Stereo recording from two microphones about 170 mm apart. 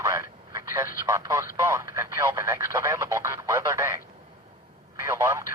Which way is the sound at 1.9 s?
15° right (ahead or behind).